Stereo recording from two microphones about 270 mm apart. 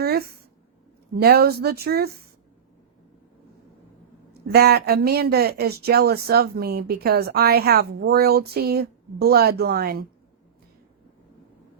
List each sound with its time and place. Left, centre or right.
0.0 s a sound: right
1.1 s speech: right
4.4 s speech: right